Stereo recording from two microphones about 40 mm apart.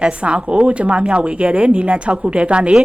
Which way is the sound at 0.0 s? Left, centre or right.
Right.